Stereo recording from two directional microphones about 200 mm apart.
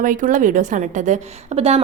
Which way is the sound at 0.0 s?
40° right (ahead or behind).